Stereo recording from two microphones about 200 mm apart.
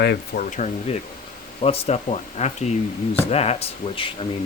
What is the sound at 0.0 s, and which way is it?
Speech, 55° left (ahead or behind).